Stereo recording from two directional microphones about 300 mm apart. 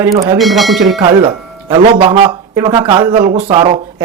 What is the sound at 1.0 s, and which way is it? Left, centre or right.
A man's voice, centre.